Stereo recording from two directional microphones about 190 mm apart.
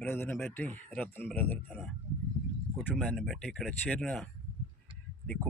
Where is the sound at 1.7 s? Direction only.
5° right (ahead or behind).